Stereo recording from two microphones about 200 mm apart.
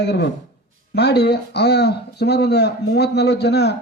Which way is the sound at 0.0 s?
60° left (ahead or behind).